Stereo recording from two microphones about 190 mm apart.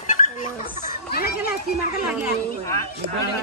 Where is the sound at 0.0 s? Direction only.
40° left (ahead or behind).